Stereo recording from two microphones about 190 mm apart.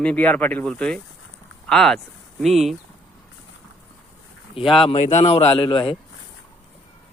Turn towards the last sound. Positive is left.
turn(degrees=25)  # may be behind; listen again after turning